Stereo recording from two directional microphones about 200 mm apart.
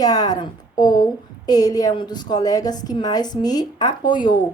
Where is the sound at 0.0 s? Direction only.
20° left (ahead or behind).